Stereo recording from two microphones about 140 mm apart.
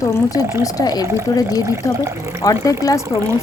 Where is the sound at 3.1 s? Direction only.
20° right (ahead or behind).